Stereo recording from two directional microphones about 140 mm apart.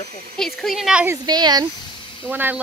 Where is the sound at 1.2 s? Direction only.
30° right (ahead or behind).